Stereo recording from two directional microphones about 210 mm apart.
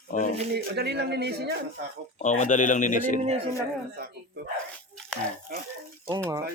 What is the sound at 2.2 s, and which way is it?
Speech, 35° left (ahead or behind).